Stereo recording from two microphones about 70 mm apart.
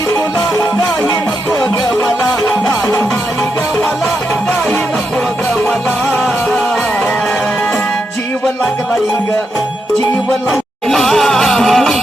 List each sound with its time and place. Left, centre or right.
0.1 s music: left
2.8 s music: left
10.5 s music: centre